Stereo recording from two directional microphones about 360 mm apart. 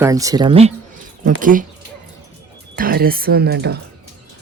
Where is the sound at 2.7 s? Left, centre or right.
Right.